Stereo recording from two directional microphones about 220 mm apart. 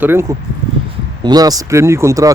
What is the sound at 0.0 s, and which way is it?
Speech, 10° right (ahead or behind).